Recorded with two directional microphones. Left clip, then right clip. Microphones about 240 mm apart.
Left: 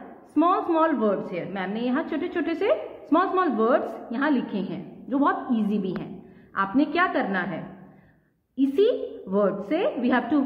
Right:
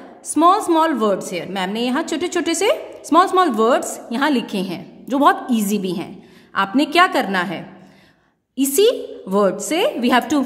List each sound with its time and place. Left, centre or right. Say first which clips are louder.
0.3 s a woman's voice: right 8 dB; right